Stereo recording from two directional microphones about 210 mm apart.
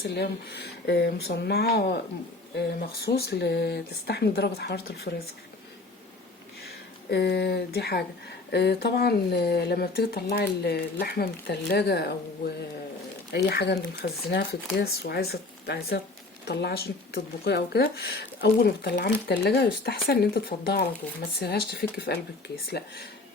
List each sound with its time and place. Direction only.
0.2 s speech: 50° left (ahead or behind)
7.1 s speech: 50° left (ahead or behind)
13.3 s speech: 50° left (ahead or behind)